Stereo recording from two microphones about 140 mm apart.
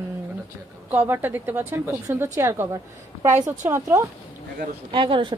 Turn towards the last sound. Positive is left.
turn(degrees=-35)  # may be behind; listen again after turning